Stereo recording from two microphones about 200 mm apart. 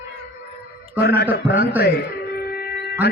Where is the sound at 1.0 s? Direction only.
55° left (ahead or behind).